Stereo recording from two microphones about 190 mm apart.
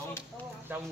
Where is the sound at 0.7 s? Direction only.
10° right (ahead or behind).